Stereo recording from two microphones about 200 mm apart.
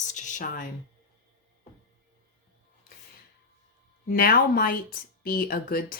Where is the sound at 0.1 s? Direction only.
40° left (ahead or behind).